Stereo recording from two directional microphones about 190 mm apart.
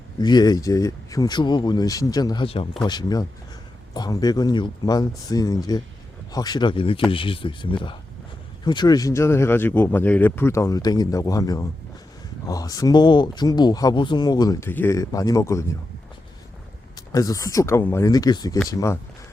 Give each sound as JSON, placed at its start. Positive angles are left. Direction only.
{"t": 0.2, "sound": "speech", "side_deg": 20}
{"t": 17.1, "sound": "speech", "side_deg": 20}